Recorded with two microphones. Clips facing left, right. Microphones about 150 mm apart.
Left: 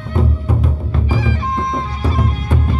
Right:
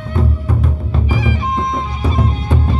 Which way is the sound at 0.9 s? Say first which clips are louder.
Right 1 dB; 15° right (ahead or behind).